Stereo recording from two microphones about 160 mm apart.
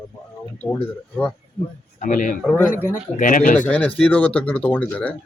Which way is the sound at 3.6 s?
5° left (ahead or behind).